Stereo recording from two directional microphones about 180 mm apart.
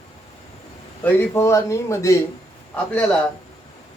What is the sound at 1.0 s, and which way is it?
Speech, 15° left (ahead or behind).